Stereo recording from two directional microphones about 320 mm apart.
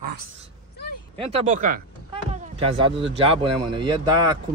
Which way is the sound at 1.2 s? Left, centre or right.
Centre.